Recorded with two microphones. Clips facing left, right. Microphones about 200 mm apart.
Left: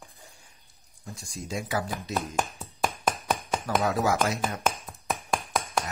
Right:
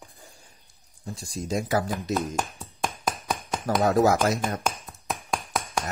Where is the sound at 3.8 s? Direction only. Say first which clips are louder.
Right 7 dB; 45° right (ahead or behind).